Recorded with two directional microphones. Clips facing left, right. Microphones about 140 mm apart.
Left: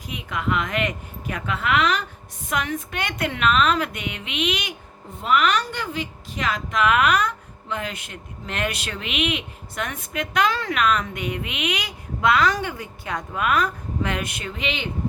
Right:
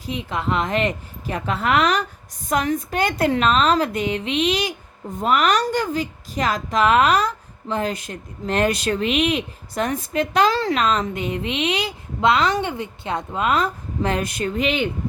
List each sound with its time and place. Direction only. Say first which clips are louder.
0.0 s a woman's voice: right 3 dB; 30° right (ahead or behind)